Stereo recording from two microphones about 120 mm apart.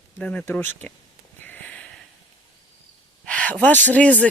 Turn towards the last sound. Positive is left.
turn(degrees=10)  # may be behind; listen again after turning